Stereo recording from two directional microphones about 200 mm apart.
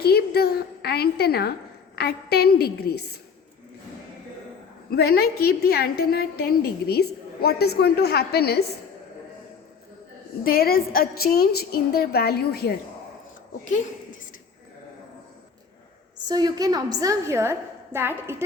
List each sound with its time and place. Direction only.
0.0 s a woman's voice: 50° left (ahead or behind)
4.9 s a woman's voice: 50° left (ahead or behind)
10.4 s a woman's voice: 50° left (ahead or behind)
16.2 s a woman's voice: 20° right (ahead or behind)